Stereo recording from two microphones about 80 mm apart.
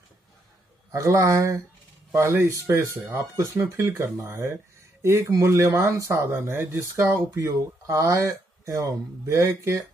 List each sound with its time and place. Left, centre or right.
0.9 s speech: right
5.0 s speech: right
7.3 s speech: right